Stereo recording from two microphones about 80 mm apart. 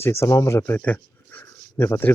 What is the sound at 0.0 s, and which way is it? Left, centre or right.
Speech, left.